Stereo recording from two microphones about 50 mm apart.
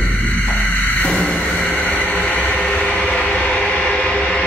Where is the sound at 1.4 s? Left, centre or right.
Centre.